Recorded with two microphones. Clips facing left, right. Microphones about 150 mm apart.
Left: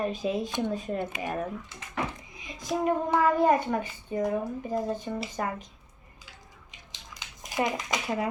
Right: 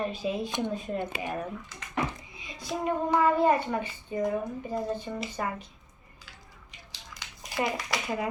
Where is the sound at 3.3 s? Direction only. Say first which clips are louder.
Left 1 dB; 45° left (ahead or behind).